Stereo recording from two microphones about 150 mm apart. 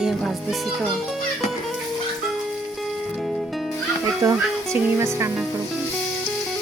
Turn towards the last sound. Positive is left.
turn(degrees=-20)  # may be behind; listen again after turning